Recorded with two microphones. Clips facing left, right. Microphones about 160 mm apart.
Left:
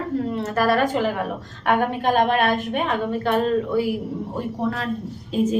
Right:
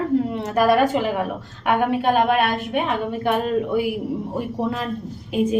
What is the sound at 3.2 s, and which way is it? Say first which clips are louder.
Speech: even; 10° right (ahead or behind).